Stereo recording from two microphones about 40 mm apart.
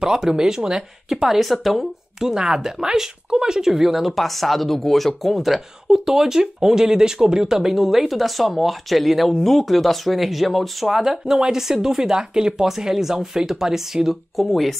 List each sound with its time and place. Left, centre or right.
0.0 s speech: centre
2.1 s speech: centre
4.1 s speech: centre
11.0 s speech: centre
14.3 s speech: centre